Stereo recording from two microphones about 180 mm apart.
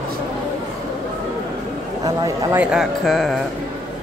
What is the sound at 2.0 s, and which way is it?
Speech, 20° right (ahead or behind).